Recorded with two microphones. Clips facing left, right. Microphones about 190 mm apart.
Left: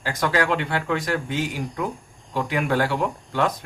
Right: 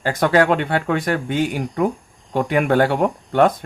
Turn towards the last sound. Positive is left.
turn(degrees=-55)  # may be behind; listen again after turning